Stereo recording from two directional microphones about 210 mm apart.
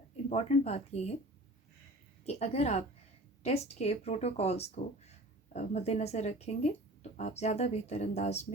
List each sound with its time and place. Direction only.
0.3 s speech: 30° left (ahead or behind)
2.2 s speech: 30° left (ahead or behind)